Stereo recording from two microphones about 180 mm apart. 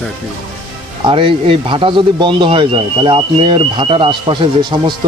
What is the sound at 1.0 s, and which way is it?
Speech, 30° right (ahead or behind).